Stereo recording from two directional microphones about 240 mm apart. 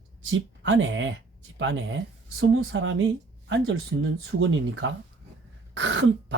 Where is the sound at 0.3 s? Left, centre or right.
Right.